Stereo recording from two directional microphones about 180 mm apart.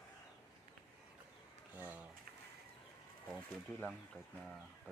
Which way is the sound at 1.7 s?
10° right (ahead or behind).